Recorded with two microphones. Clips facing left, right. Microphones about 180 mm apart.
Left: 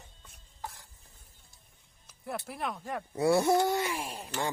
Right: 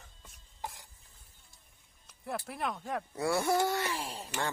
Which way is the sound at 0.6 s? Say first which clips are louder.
Right 1 dB; 15° right (ahead or behind).